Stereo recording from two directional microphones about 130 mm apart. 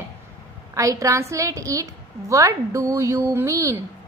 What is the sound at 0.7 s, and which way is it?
A woman's voice, 25° right (ahead or behind).